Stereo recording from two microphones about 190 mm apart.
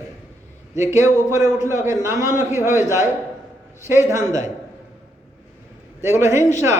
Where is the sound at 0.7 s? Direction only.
15° right (ahead or behind).